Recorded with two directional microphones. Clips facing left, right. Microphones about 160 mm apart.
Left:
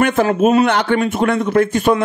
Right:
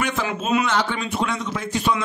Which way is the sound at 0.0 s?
55° left (ahead or behind).